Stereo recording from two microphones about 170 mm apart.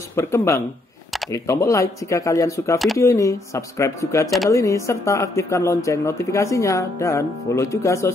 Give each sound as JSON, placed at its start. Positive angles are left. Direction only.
{"t": 0.1, "sound": "speech", "side_deg": 15}